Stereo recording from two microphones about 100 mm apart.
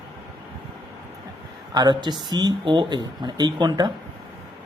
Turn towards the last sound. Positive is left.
turn(degrees=-45)  # may be behind; listen again after turning